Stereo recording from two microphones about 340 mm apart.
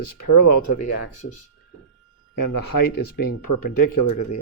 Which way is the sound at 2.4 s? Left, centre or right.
Left.